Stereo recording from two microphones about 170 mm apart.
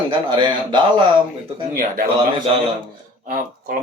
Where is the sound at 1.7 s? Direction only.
60° right (ahead or behind).